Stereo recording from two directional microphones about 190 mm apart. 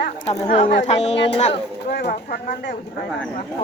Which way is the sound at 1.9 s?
55° left (ahead or behind).